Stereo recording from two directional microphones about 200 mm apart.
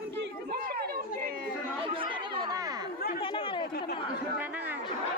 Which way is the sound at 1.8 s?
25° right (ahead or behind).